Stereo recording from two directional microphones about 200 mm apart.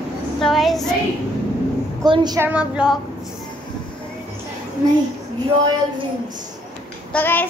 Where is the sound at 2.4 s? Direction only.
5° right (ahead or behind).